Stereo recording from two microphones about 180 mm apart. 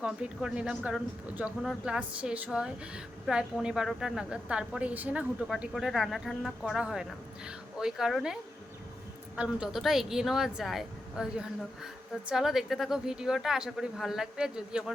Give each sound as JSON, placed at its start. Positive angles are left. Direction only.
{"t": 0.0, "sound": "speech", "side_deg": -5}